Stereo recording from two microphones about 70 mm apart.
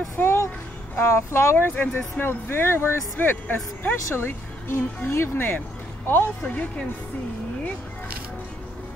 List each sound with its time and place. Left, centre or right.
0.2 s music: left
0.9 s speech: left
1.7 s speech: left
6.4 s speech: centre